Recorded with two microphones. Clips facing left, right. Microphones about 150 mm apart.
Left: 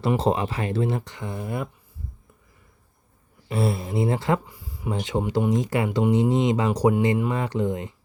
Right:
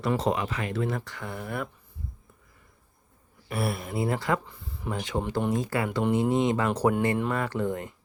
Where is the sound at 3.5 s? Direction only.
25° left (ahead or behind).